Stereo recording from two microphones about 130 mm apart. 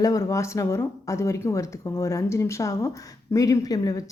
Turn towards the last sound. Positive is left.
turn(degrees=30)  # may be behind; listen again after turning